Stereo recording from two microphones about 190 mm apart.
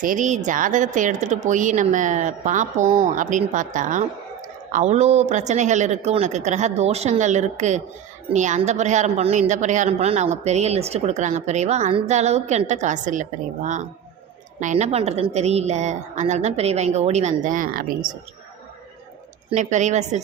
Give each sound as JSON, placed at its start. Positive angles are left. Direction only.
{"t": 0.0, "sound": "speech", "side_deg": -45}
{"t": 19.5, "sound": "speech", "side_deg": -40}